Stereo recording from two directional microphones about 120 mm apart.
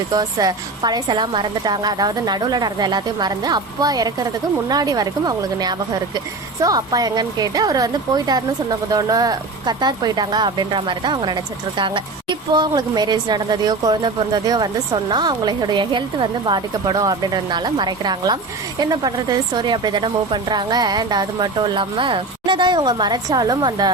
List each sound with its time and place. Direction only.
0.1 s speech: 30° right (ahead or behind)